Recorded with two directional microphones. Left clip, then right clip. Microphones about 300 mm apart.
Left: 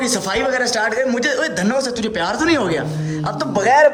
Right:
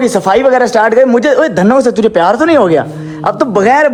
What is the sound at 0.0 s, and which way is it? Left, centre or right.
Speech, centre.